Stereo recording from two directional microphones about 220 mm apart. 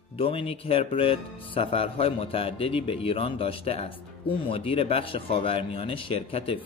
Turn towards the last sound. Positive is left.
turn(degrees=25)  # may be behind; listen again after turning